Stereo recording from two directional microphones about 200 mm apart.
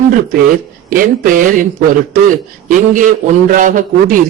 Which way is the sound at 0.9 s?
45° right (ahead or behind).